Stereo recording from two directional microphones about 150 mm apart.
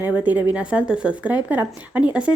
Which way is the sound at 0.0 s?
10° right (ahead or behind).